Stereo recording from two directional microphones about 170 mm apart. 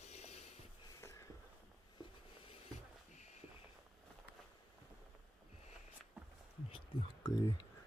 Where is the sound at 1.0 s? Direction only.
15° left (ahead or behind).